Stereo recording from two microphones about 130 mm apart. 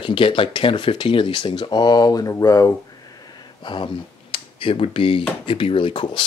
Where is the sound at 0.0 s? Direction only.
40° left (ahead or behind).